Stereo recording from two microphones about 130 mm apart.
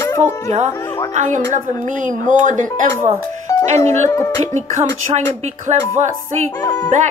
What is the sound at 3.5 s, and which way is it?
Music, 25° left (ahead or behind).